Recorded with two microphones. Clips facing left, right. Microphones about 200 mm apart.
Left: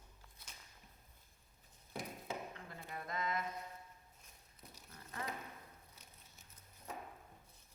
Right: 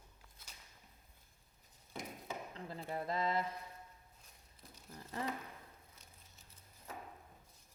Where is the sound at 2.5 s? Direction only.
30° right (ahead or behind).